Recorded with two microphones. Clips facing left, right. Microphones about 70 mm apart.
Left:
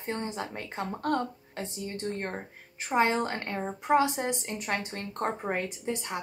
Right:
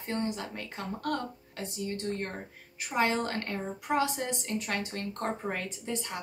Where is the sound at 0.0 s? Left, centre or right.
Left.